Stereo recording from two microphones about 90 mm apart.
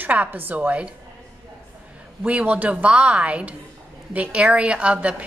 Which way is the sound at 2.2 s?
15° right (ahead or behind).